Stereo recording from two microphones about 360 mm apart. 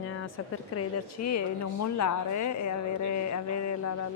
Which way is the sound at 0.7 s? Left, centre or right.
Left.